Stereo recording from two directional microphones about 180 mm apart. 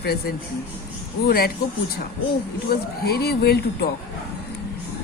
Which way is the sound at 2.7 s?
60° left (ahead or behind).